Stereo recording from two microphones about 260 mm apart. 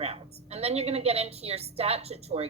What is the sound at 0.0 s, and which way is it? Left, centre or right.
A woman's voice, right.